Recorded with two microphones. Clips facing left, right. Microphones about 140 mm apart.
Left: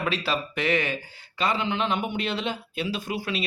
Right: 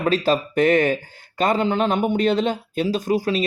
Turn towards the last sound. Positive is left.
turn(degrees=-40)  # may be behind; listen again after turning